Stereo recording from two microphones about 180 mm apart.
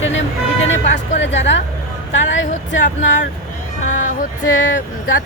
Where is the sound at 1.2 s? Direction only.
85° left.